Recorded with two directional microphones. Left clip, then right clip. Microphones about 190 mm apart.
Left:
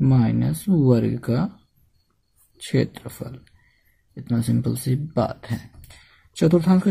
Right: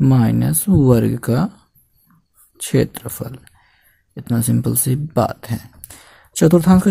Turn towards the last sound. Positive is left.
turn(degrees=-35)  # may be behind; listen again after turning